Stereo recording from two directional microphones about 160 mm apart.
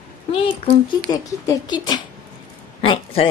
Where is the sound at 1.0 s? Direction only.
25° left (ahead or behind).